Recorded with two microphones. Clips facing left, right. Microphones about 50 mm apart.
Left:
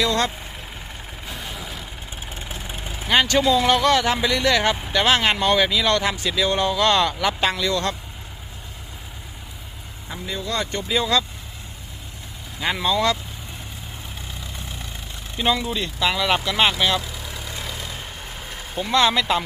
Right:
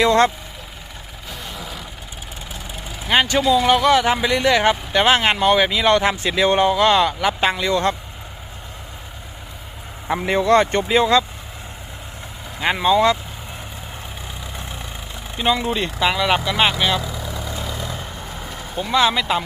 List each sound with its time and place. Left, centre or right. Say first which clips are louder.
0.0 s speech: right 7 dB; right
1.3 s vehicle: right 2 dB; centre
3.1 s speech: right 1 dB; centre
10.1 s speech: right 11 dB; right
10.5 s speech: right 11 dB; right
10.8 s speech: right 6 dB; right
12.6 s speech: right 5 dB; right
15.4 s speech: right 2 dB; centre
15.7 s speech: right 4 dB; right
16.0 s speech: right 2 dB; centre
18.8 s speech: right 1 dB; centre